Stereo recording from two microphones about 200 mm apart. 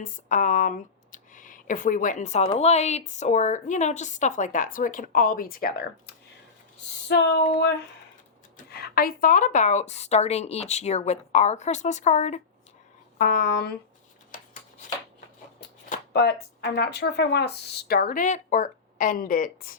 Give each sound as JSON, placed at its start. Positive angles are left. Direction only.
{"t": 0.0, "sound": "a woman's voice", "side_deg": 40}
{"t": 7.1, "sound": "a sound", "side_deg": 55}
{"t": 8.5, "sound": "a woman's voice", "side_deg": 50}
{"t": 13.1, "sound": "speech", "side_deg": 45}
{"t": 16.1, "sound": "speech", "side_deg": 55}